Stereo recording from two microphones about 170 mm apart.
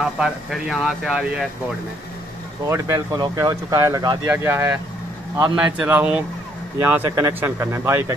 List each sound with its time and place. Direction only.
0.0 s speech: 5° right (ahead or behind)
2.7 s speech: 20° right (ahead or behind)